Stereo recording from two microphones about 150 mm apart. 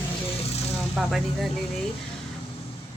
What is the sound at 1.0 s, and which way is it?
Speech, centre (ahead or behind).